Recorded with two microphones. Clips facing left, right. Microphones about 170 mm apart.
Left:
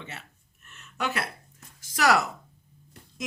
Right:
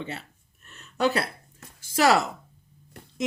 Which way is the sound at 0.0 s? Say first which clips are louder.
Right 7 dB; 30° right (ahead or behind).